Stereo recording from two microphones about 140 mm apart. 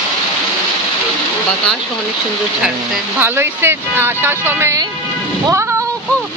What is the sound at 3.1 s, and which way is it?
Speech, 15° right (ahead or behind).